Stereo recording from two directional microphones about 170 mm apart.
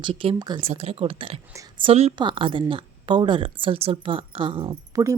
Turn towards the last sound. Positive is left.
turn(degrees=-25)  # may be behind; listen again after turning